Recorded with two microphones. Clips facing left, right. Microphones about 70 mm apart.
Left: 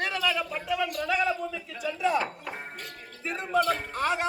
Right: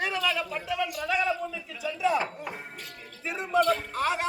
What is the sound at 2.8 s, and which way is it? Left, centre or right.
Music, centre.